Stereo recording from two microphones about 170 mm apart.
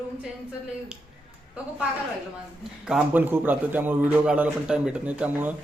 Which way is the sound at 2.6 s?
5° right (ahead or behind).